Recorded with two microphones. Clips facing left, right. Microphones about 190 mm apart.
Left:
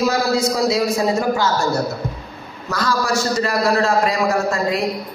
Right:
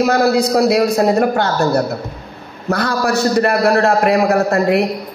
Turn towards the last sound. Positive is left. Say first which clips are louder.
# right 6 dB
turn(degrees=-60)  # may be behind; listen again after turning